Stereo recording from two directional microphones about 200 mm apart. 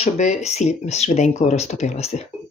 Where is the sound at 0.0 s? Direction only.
35° left (ahead or behind).